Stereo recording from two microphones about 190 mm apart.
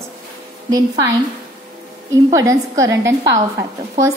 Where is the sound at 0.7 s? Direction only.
20° right (ahead or behind).